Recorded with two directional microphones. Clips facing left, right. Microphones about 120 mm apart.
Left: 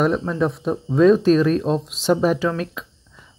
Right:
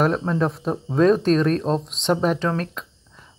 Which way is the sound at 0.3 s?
Centre (ahead or behind).